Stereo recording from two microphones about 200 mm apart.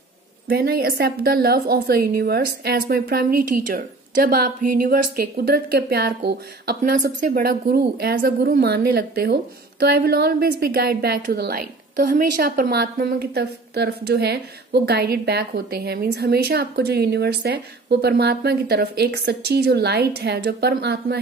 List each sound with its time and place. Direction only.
0.5 s a woman's voice: 50° right (ahead or behind)